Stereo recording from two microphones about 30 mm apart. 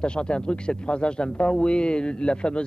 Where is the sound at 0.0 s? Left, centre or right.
Left.